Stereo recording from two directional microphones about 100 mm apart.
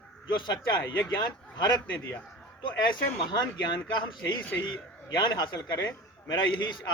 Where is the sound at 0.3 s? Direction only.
45° left (ahead or behind).